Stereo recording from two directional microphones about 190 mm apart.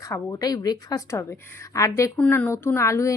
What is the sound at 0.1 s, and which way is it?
A woman's voice, 20° left (ahead or behind).